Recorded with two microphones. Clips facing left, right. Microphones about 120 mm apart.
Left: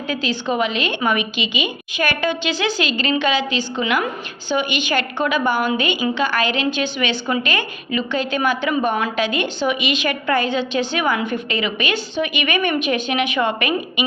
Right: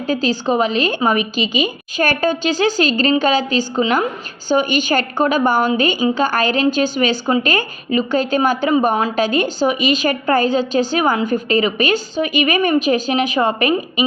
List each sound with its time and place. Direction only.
0.1 s a woman's voice: 40° right (ahead or behind)